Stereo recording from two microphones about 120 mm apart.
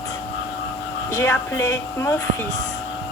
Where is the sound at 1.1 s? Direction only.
25° left (ahead or behind).